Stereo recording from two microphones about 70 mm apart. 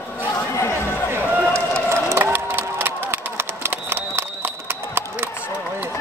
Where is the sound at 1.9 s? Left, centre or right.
Right.